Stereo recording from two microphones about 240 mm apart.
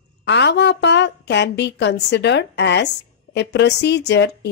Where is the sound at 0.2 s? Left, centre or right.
Left.